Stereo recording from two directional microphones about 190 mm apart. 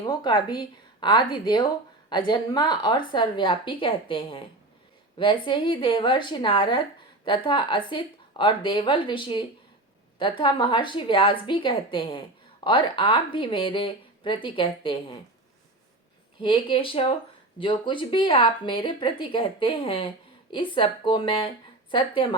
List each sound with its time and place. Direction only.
0.0 s a woman's voice: 20° left (ahead or behind)
16.4 s a woman's voice: 25° left (ahead or behind)